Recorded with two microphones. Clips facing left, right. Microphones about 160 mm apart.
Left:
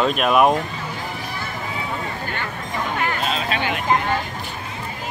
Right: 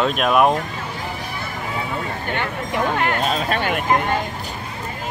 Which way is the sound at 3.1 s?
50° right (ahead or behind).